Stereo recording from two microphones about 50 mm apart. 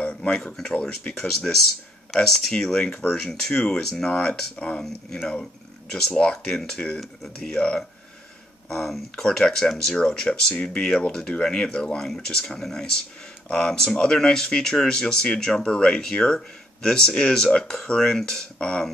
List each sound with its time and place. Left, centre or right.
0.0 s a sound: left
0.7 s speech: left
1.3 s speech: centre
9.1 s speech: centre